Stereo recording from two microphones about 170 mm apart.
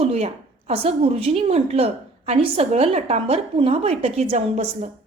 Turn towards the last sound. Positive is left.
turn(degrees=-40)  # may be behind; listen again after turning